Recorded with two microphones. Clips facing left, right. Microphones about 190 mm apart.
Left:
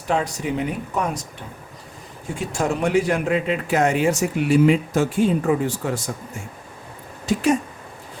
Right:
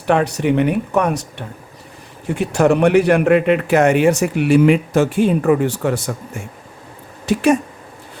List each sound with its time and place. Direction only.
0.1 s a man's voice: 65° right (ahead or behind)